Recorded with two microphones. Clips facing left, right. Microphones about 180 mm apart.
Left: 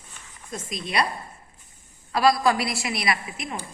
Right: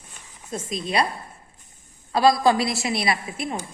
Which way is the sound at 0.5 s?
30° right (ahead or behind).